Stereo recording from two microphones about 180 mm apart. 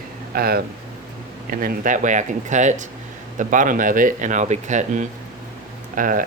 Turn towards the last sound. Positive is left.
turn(degrees=-50)  # may be behind; listen again after turning